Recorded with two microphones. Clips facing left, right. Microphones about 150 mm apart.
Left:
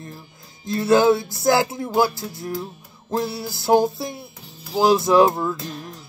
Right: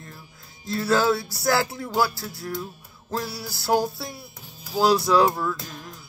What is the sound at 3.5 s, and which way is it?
Speech, 20° left (ahead or behind).